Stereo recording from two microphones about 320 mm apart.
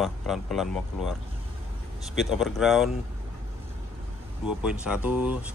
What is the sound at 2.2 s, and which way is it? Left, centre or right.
Speech, centre.